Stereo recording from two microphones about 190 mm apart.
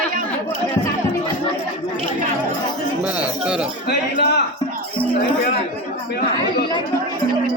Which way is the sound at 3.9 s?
60° left (ahead or behind).